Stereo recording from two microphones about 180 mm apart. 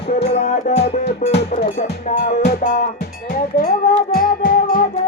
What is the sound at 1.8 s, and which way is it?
Speech, 40° left (ahead or behind).